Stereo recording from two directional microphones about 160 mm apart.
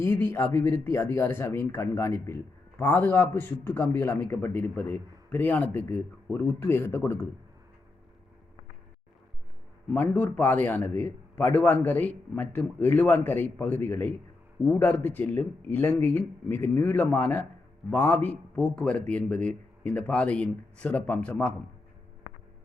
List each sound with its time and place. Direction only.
0.0 s a man's voice: 15° left (ahead or behind)
9.9 s a man's voice: 10° left (ahead or behind)